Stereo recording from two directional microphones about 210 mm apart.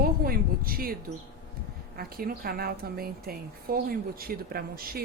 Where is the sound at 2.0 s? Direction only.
45° right (ahead or behind).